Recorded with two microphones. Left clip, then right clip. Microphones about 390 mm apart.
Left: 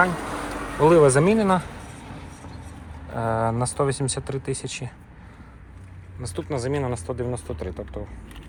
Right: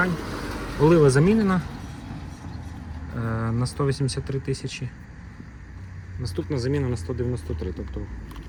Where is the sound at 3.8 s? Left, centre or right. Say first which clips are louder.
Left 1 dB; centre.